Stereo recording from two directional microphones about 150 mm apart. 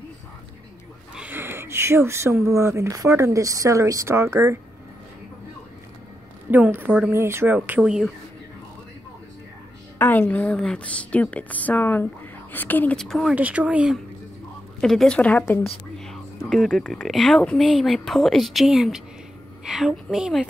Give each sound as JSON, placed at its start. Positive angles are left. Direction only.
{"t": 1.1, "sound": "speech", "side_deg": -10}
{"t": 6.5, "sound": "speech", "side_deg": -10}
{"t": 9.9, "sound": "a woman's voice", "side_deg": 15}
{"t": 13.3, "sound": "speech", "side_deg": -10}
{"t": 14.8, "sound": "a woman's voice", "side_deg": 5}
{"t": 16.0, "sound": "speech", "side_deg": 0}